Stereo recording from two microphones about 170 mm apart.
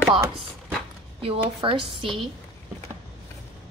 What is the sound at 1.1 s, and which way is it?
A woman's voice, 30° right (ahead or behind).